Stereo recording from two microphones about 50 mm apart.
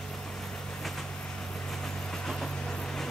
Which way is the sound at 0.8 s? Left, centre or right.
Centre.